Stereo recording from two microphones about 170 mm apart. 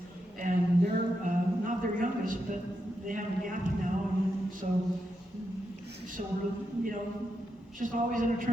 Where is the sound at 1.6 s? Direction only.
50° right (ahead or behind).